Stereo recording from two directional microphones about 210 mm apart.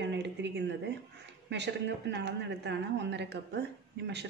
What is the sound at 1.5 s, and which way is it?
Speech, 55° right (ahead or behind).